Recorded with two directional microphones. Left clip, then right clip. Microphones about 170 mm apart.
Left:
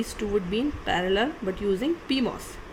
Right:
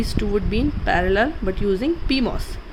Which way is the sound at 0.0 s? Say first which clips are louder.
Right 4 dB; 30° right (ahead or behind).